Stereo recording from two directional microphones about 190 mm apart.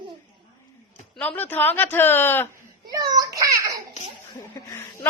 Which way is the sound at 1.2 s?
10° left (ahead or behind).